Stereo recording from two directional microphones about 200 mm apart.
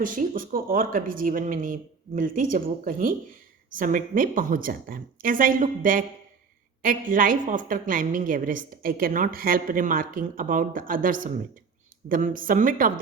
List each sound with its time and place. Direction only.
0.0 s a woman's voice: 45° right (ahead or behind)